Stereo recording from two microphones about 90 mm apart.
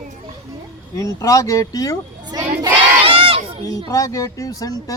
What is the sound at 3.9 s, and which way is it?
Speech, 40° left (ahead or behind).